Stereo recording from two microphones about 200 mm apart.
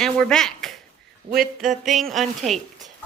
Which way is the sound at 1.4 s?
Centre (ahead or behind).